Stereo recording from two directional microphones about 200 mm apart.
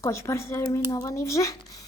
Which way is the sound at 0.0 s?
15° left (ahead or behind).